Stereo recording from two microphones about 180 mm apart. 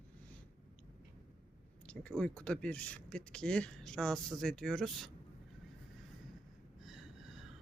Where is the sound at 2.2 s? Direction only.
5° left (ahead or behind).